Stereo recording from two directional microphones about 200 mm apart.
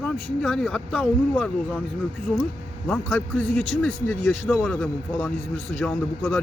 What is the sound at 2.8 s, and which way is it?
A man's voice, 10° left (ahead or behind).